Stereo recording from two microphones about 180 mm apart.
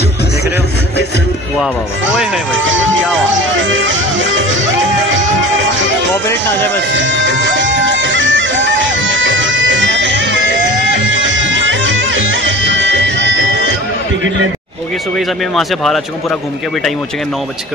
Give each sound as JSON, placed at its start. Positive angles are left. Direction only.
{"t": 2.5, "sound": "speech", "side_deg": -90}
{"t": 3.5, "sound": "music", "side_deg": -90}
{"t": 6.9, "sound": "music", "side_deg": -90}
{"t": 15.1, "sound": "speech", "side_deg": 0}